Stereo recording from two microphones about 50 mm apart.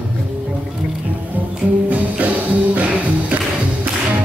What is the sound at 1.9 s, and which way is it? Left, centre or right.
Music, right.